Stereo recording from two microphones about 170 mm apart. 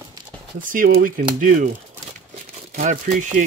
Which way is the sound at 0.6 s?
55° right (ahead or behind).